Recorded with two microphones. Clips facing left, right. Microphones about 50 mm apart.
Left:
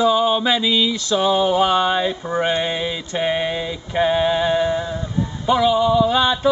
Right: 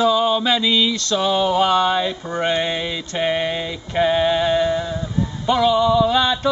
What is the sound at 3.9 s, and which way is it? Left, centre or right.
Speech, centre.